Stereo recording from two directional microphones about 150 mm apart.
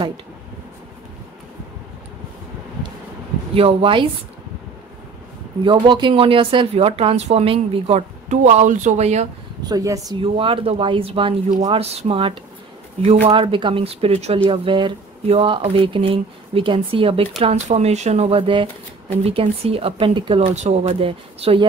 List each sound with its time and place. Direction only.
3.5 s speech: 40° right (ahead or behind)
5.6 s speech: 35° right (ahead or behind)
8.3 s speech: 50° right (ahead or behind)
9.6 s speech: 25° right (ahead or behind)
10.2 s speech: 35° right (ahead or behind)
13.4 s speech: 35° right (ahead or behind)